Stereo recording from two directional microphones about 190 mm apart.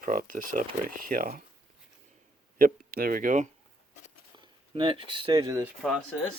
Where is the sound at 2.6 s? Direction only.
50° right (ahead or behind).